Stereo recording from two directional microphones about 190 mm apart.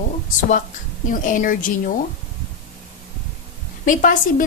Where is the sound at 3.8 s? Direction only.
45° left (ahead or behind).